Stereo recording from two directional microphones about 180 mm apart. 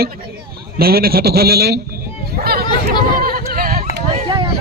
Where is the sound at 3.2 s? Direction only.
55° right (ahead or behind).